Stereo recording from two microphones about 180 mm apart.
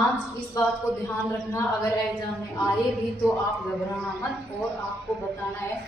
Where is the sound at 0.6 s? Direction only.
20° left (ahead or behind).